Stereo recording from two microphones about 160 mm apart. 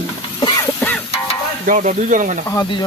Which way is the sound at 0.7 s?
10° left (ahead or behind).